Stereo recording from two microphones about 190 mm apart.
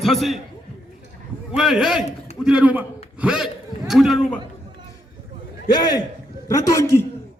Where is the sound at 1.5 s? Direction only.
5° right (ahead or behind).